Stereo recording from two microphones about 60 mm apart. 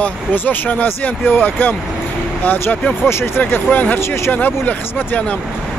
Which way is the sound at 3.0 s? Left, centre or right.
Left.